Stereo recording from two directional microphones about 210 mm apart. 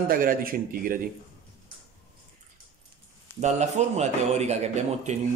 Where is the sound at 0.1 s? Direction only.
40° right (ahead or behind).